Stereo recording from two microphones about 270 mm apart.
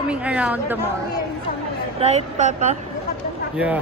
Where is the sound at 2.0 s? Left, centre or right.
Right.